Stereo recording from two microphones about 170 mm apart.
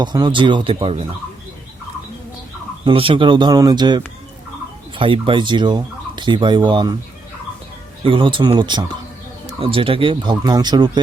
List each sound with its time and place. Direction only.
0.0 s turkey: 25° right (ahead or behind)
2.8 s turkey: 30° right (ahead or behind)
8.0 s turkey: 30° right (ahead or behind)